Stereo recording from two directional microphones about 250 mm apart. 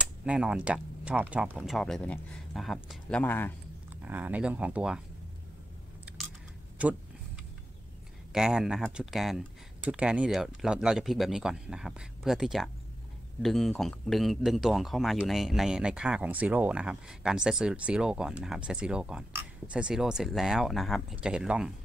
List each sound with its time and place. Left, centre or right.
0.0 s speech: centre
4.0 s speech: centre
6.8 s speech: centre
8.3 s speech: centre